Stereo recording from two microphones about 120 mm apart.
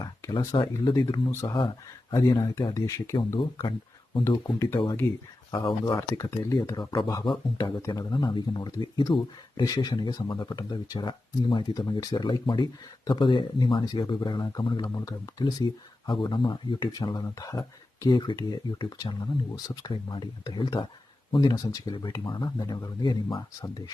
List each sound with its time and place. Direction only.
0.0 s speech: 40° left (ahead or behind)
1.3 s speech: 25° left (ahead or behind)
1.5 s speech: 45° left (ahead or behind)
2.1 s speech: 35° left (ahead or behind)
3.2 s speech: 40° left (ahead or behind)